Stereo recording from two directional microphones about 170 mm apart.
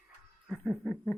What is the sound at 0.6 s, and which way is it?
Speech, centre (ahead or behind).